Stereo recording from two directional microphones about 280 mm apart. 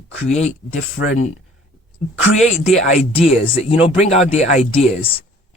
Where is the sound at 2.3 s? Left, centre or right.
Left.